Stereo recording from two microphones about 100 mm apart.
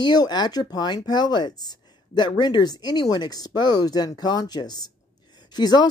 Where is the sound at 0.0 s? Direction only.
45° left (ahead or behind).